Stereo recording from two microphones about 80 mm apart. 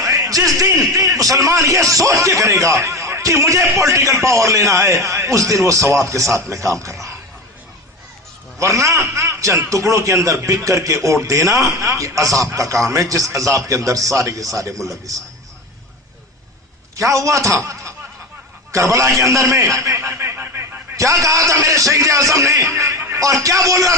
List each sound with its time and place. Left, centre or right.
0.0 s a sound: right
0.5 s a man's voice: right
8.5 s a man's voice: right
17.0 s a man's voice: right
20.9 s a man's voice: right